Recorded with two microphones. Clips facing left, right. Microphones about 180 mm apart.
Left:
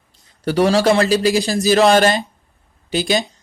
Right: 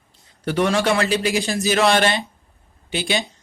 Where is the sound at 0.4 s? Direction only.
35° left (ahead or behind).